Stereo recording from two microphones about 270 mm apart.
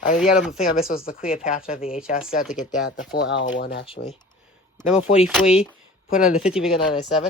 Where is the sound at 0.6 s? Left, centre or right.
Left.